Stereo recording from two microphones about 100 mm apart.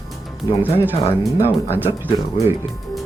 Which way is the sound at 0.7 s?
20° right (ahead or behind).